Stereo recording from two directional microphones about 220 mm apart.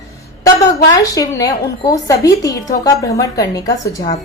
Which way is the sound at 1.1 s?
15° left (ahead or behind).